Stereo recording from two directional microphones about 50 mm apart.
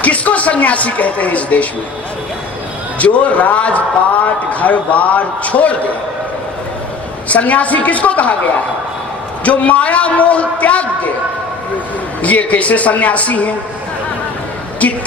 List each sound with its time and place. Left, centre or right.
0.0 s speech: left
3.0 s a man's voice: left
7.3 s a man's voice: left
9.4 s a man's voice: left
12.2 s a man's voice: left